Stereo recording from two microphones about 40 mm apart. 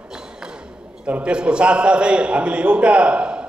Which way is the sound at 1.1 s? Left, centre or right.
Right.